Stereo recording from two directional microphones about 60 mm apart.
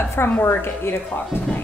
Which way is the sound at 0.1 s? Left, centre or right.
Left.